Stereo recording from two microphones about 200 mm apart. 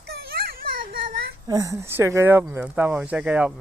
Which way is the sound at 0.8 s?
45° right (ahead or behind).